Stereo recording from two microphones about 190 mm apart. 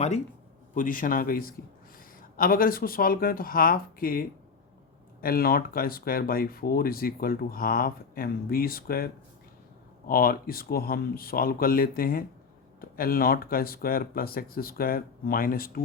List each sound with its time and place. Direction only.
0.7 s speech: 45° left (ahead or behind)
10.1 s speech: 50° left (ahead or behind)